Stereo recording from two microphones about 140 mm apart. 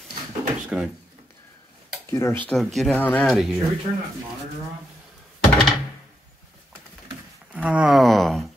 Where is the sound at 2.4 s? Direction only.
Centre (ahead or behind).